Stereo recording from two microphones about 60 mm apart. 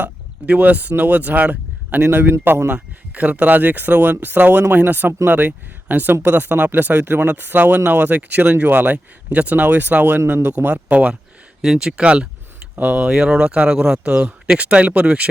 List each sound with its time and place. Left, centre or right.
0.0 s speech: right
2.0 s speech: right
2.7 s speech: right
10.9 s speech: centre